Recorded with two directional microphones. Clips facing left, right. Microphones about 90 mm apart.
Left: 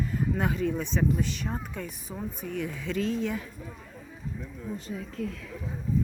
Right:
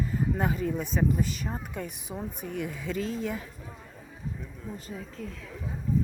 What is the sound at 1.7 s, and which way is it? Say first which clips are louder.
Speech: right 1 dB; 15° right (ahead or behind).